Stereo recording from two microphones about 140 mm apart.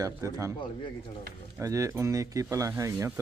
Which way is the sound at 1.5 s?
20° right (ahead or behind).